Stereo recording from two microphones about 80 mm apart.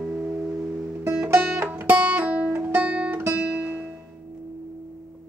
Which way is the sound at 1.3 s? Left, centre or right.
Right.